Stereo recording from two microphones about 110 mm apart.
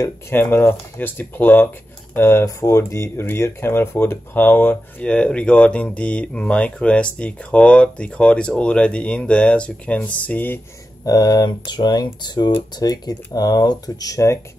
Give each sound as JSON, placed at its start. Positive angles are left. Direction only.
{"t": 0.4, "sound": "speech", "side_deg": 20}
{"t": 11.1, "sound": "speech", "side_deg": 40}